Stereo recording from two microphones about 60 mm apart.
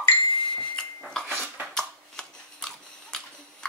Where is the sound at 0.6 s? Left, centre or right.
Centre.